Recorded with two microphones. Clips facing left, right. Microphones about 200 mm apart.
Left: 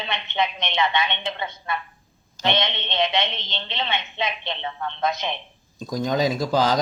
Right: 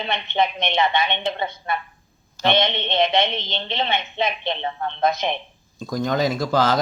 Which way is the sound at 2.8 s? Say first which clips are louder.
Right 4 dB; 35° right (ahead or behind).